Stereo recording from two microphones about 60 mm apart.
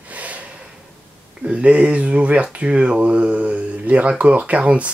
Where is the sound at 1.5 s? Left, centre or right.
Right.